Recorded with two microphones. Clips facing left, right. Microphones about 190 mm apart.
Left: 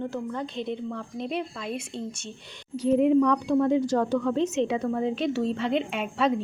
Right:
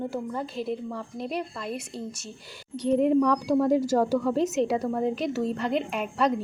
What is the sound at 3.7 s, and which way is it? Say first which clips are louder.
Speech: even; 45° right (ahead or behind).